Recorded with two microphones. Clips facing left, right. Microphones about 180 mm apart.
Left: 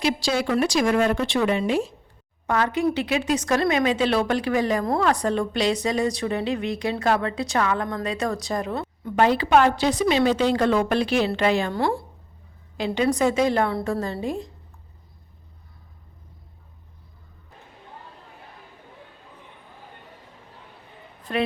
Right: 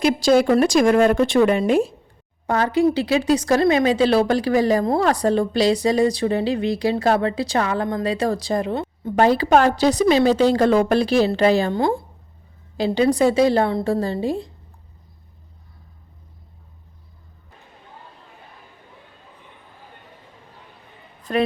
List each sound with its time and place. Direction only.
0.0 s speech: 50° right (ahead or behind)
2.5 s speech: 35° right (ahead or behind)
9.1 s speech: 40° right (ahead or behind)
12.7 s speech: 35° right (ahead or behind)
21.3 s speech: 40° right (ahead or behind)